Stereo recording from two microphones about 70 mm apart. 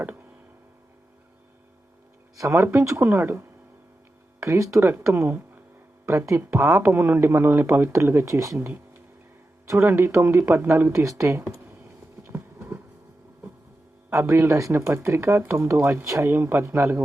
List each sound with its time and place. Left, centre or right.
0.0 s tick: right
2.5 s speech: right
4.4 s speech: right
6.1 s speech: right
9.8 s speech: right
11.6 s vehicle: right
14.1 s speech: right